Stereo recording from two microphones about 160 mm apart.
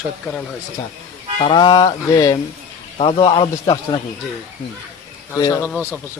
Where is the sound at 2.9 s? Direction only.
35° left (ahead or behind).